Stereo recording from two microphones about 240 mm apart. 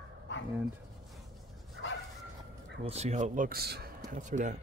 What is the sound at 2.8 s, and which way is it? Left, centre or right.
Speech, right.